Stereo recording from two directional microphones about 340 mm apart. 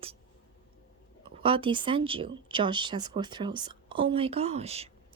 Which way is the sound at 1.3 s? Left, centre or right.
Centre.